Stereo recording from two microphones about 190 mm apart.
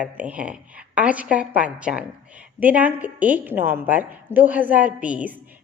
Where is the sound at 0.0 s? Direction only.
10° right (ahead or behind).